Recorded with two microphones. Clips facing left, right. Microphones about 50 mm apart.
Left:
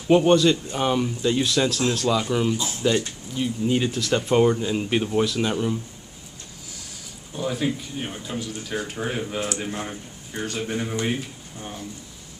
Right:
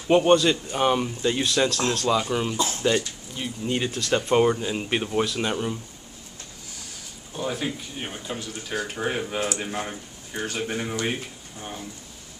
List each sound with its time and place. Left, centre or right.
0.1 s speech: centre
7.3 s speech: centre